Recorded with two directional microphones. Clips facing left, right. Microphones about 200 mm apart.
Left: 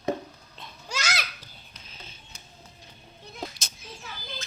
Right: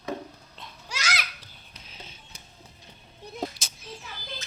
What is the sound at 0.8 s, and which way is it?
Babbling, 45° left (ahead or behind).